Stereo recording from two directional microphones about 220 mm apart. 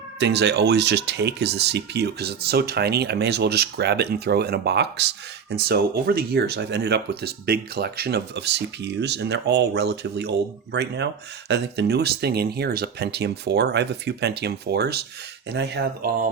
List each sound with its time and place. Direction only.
0.2 s speech: 50° right (ahead or behind)